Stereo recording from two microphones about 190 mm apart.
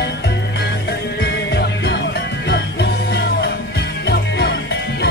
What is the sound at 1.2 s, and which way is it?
Music, 60° left (ahead or behind).